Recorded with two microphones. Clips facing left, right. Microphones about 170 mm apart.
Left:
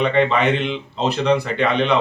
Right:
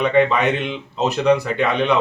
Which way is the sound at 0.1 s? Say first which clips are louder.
Right 1 dB; 10° right (ahead or behind).